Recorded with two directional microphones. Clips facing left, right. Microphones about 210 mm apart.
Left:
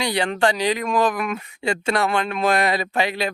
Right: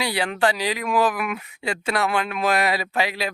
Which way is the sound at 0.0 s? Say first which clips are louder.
Left 2 dB; 5° right (ahead or behind).